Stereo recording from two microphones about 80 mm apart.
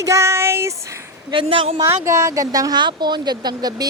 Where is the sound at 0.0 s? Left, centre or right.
Right.